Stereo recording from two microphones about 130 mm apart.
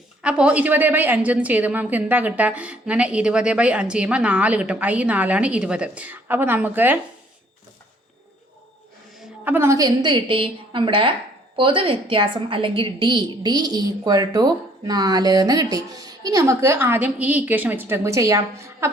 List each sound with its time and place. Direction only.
0.2 s a woman's voice: 10° right (ahead or behind)
9.4 s a woman's voice: 15° right (ahead or behind)